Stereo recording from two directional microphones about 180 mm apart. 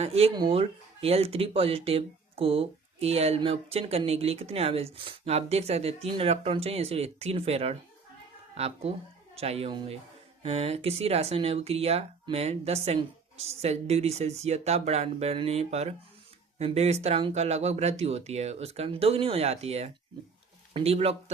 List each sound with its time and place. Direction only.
0.0 s speech: 35° right (ahead or behind)